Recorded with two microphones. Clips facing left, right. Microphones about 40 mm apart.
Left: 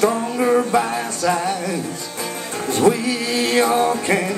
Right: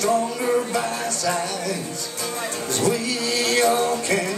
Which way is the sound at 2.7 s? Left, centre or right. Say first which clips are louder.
Left 7 dB; left.